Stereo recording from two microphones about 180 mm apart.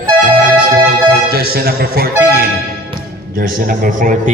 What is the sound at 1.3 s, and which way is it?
Speech, 60° right (ahead or behind).